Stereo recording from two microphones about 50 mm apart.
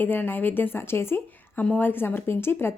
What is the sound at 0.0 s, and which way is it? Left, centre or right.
Speech, left.